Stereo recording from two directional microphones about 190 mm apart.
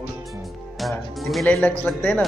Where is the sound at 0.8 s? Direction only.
Centre (ahead or behind).